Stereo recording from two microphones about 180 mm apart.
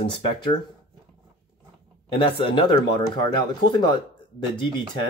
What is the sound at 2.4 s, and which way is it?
Speech, 25° left (ahead or behind).